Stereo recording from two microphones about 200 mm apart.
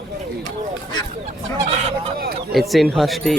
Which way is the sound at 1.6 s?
30° right (ahead or behind).